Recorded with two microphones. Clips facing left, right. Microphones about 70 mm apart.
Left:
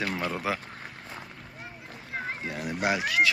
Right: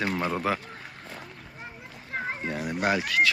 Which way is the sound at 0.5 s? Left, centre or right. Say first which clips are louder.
Right 2 dB; centre.